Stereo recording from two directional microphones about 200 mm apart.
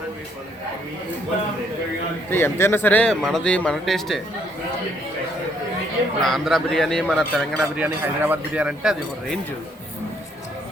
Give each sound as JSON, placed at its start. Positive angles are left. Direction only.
{"t": 2.3, "sound": "speech", "side_deg": 10}
{"t": 6.2, "sound": "speech", "side_deg": 0}
{"t": 7.8, "sound": "speech", "side_deg": -10}